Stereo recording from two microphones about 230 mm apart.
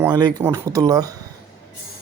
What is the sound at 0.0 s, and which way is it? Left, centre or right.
Speech, centre.